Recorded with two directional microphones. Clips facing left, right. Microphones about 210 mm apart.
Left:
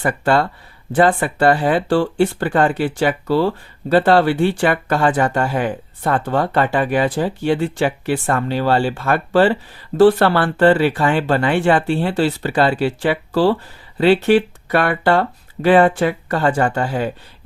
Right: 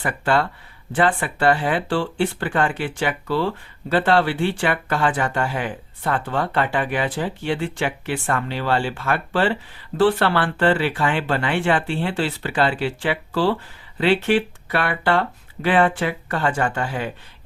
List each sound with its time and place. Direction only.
0.0 s speech: 40° left (ahead or behind)